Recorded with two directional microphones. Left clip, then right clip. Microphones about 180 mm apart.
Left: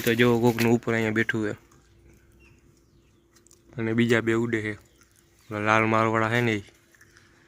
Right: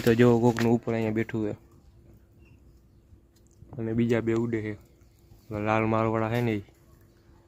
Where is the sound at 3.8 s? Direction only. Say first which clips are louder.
Left 4 dB; 10° left (ahead or behind).